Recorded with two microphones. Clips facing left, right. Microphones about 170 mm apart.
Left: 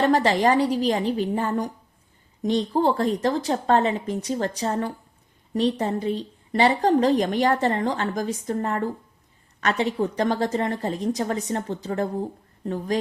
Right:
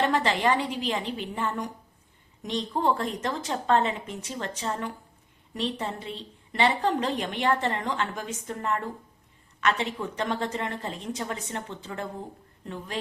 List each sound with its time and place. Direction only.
0.0 s a woman's voice: 40° left (ahead or behind)